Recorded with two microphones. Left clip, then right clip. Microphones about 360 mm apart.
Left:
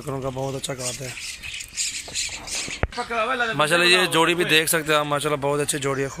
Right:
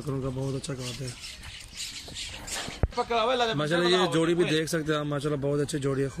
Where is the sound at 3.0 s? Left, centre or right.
Centre.